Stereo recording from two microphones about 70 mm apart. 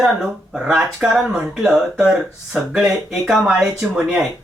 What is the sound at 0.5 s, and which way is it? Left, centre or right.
Speech, centre.